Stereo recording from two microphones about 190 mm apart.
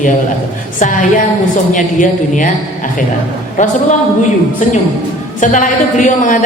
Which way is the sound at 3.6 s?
40° left (ahead or behind).